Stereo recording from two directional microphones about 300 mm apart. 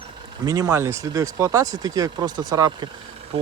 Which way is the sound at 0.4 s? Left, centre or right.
Centre.